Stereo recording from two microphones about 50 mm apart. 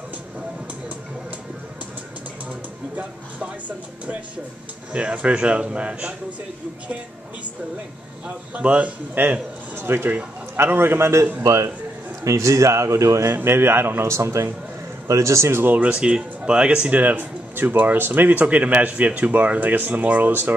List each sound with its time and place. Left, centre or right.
3.0 s speech: right
8.5 s speech: right
9.2 s a man's voice: right
11.4 s speech: right
13.3 s a man's voice: right
14.0 s a man's voice: right
15.1 s speech: right
15.5 s a man's voice: right
15.9 s speech: centre
16.9 s speech: right